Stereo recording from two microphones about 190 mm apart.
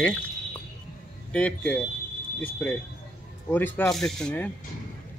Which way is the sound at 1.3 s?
5° left (ahead or behind).